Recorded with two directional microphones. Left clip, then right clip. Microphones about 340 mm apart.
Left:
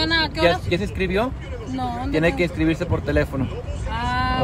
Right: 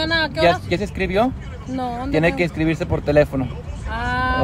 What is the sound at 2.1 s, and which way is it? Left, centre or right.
Speech, right.